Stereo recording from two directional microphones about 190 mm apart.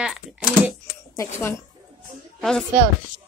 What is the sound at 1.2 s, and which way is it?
Speech, 15° left (ahead or behind).